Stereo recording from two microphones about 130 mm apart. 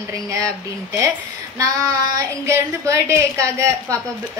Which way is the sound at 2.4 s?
20° right (ahead or behind).